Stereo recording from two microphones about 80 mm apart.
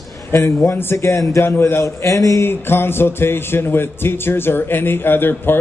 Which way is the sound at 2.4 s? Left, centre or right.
Left.